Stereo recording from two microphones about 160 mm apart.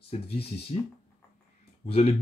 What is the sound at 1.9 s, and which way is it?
Speech, 35° left (ahead or behind).